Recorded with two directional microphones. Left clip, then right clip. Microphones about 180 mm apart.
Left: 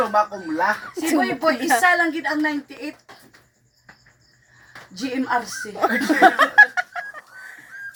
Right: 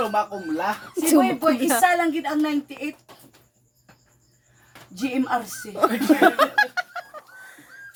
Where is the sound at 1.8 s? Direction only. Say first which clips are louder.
Left 2 dB; 25° right (ahead or behind).